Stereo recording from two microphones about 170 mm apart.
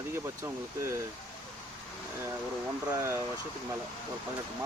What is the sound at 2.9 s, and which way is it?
Speech, 15° right (ahead or behind).